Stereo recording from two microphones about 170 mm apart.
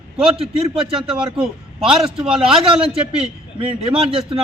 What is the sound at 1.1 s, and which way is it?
A man's voice, 5° right (ahead or behind).